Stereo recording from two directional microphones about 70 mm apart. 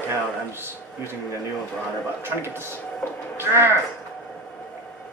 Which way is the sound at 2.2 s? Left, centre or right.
Right.